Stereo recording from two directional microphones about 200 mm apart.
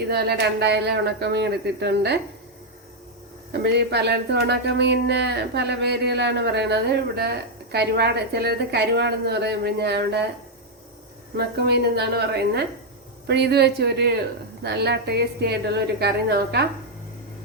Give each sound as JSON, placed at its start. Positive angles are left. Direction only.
{"t": 0.1, "sound": "speech", "side_deg": -55}
{"t": 3.5, "sound": "speech", "side_deg": -55}
{"t": 11.3, "sound": "speech", "side_deg": -55}